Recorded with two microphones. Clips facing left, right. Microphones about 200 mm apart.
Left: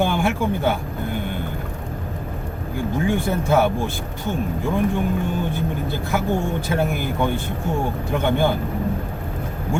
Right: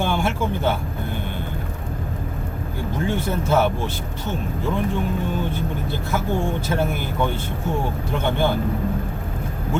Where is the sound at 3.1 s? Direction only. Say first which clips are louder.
Left 1 dB; 15° left (ahead or behind).